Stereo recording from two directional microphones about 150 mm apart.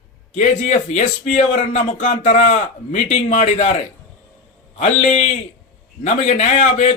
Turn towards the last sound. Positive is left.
turn(degrees=50)  # may be behind; listen again after turning